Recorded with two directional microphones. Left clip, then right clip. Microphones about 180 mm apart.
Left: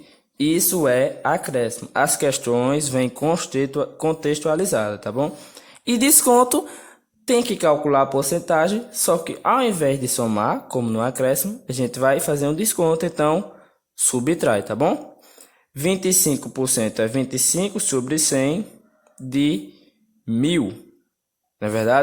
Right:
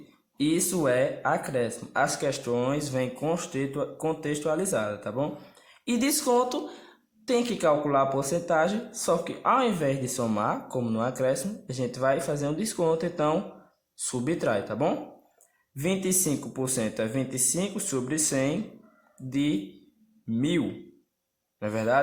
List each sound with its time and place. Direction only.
0.3 s speech: 45° left (ahead or behind)